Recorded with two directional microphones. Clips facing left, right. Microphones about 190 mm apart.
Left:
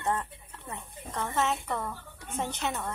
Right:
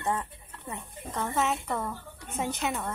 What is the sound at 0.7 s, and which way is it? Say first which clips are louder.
A woman's voice: right 2 dB; 10° right (ahead or behind).